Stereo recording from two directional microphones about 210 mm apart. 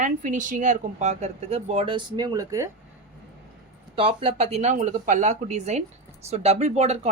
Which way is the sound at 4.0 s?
25° right (ahead or behind).